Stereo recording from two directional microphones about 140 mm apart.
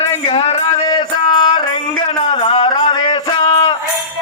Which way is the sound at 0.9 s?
35° left (ahead or behind).